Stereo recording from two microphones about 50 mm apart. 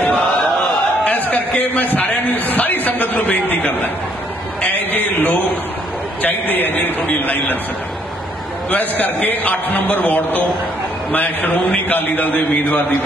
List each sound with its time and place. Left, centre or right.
1.0 s a sound: left
6.2 s a man's voice: left
8.6 s a man's voice: left